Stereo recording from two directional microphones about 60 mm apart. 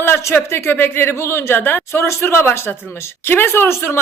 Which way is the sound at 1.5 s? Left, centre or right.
Left.